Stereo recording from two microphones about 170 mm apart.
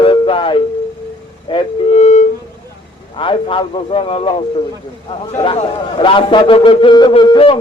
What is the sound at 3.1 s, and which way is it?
A man's voice, 30° left (ahead or behind).